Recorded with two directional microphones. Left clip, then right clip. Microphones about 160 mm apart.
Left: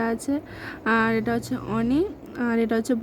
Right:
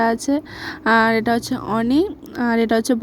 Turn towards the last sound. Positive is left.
turn(degrees=-40)  # may be behind; listen again after turning